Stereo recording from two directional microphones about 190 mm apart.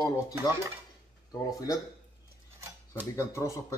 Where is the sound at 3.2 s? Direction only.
15° left (ahead or behind).